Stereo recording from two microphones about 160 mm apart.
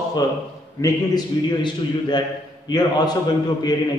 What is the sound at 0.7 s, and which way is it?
A man's voice, 20° left (ahead or behind).